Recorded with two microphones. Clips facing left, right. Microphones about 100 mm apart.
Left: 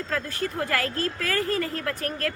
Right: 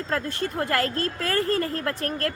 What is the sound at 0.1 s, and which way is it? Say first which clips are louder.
A woman's voice: right 2 dB; 30° right (ahead or behind).